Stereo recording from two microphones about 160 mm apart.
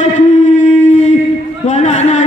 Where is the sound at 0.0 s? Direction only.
50° left (ahead or behind).